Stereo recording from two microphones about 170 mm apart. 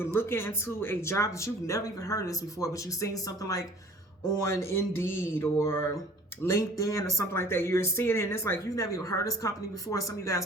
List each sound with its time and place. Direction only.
0.0 s speech: 15° left (ahead or behind)